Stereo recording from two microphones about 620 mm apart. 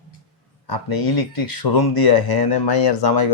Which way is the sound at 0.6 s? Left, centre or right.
Left.